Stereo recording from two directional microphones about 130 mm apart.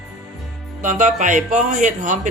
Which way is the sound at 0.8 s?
75° right (ahead or behind).